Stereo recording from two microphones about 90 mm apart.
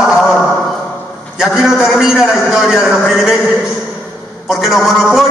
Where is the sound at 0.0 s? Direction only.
5° right (ahead or behind).